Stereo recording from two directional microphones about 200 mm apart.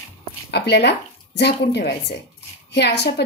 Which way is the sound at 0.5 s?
55° left (ahead or behind).